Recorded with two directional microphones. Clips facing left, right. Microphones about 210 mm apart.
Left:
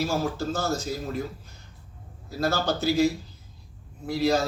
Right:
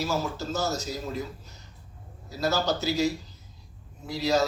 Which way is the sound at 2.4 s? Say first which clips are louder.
Left 1 dB; 55° left (ahead or behind).